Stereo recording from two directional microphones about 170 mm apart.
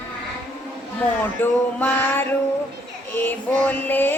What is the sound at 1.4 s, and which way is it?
Music, 10° left (ahead or behind).